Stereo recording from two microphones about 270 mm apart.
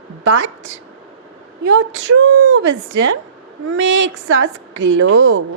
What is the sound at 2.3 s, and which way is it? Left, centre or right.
Speech, right.